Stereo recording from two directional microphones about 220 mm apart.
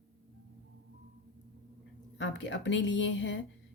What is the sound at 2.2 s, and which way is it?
Speech, 55° left (ahead or behind).